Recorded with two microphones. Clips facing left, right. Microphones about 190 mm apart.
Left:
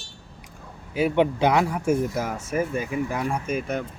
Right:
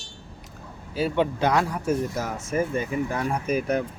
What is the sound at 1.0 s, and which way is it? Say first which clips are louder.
Speech: left 3 dB; 15° left (ahead or behind).